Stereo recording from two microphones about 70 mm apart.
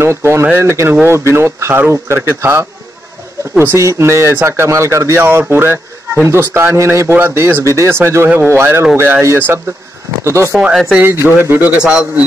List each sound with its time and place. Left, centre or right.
0.0 s a man's voice: right
7.6 s a man's voice: right
10.7 s speech: centre
11.0 s speech: right
11.8 s a man's voice: centre